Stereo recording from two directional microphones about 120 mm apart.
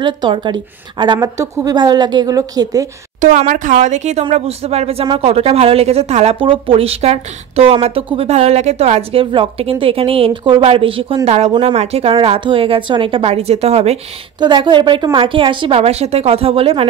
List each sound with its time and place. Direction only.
0.0 s a woman's voice: 40° right (ahead or behind)
3.2 s speech: 90° right; by 6.3 s 65° right (ahead or behind)
6.4 s speech: 50° right (ahead or behind); by 9.2 s 65° right (ahead or behind)
9.2 s a woman's voice: 50° right (ahead or behind)
11.2 s speech: 60° right (ahead or behind)
14.4 s a woman's voice: 40° right (ahead or behind)